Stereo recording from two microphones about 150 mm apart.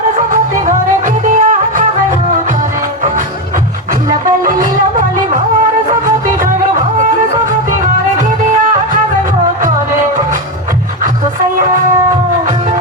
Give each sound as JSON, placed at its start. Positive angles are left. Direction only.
{"t": 1.2, "sound": "music", "side_deg": -55}
{"t": 4.4, "sound": "music", "side_deg": -60}